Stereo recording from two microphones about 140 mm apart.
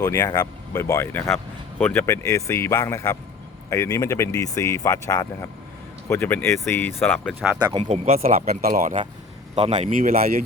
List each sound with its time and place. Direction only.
0.0 s speech: 25° left (ahead or behind)
2.0 s speech: 20° left (ahead or behind)
7.6 s speech: 35° right (ahead or behind)
7.9 s speech: 50° right (ahead or behind)
8.2 s speech: 80° right
9.8 s speech: 80° right